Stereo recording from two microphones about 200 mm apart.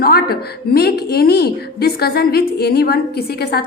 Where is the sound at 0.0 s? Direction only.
50° left (ahead or behind).